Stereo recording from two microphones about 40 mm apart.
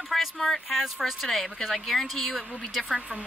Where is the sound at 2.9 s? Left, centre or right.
Right.